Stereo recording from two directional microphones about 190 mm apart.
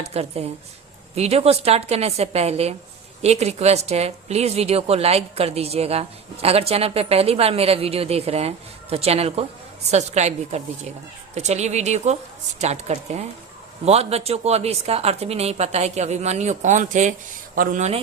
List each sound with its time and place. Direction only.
0.0 s a woman's voice: 35° right (ahead or behind)